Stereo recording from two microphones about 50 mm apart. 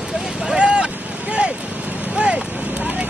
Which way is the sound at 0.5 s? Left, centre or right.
Centre.